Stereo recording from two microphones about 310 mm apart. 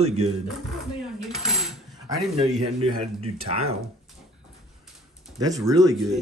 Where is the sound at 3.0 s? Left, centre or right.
Centre.